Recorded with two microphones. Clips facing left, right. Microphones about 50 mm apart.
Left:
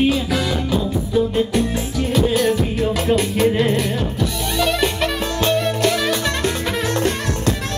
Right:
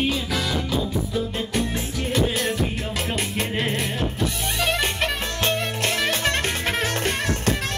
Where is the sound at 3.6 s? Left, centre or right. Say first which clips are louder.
Left 7 dB; centre.